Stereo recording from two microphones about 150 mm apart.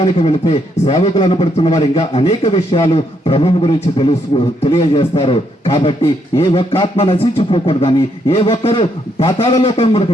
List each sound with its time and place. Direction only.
0.0 s a man's voice: 35° left (ahead or behind)